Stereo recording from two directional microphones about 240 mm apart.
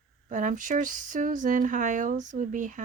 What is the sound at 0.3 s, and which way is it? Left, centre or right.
Speech, right.